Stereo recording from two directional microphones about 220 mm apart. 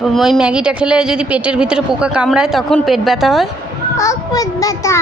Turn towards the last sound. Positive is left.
turn(degrees=15)  # may be behind; listen again after turning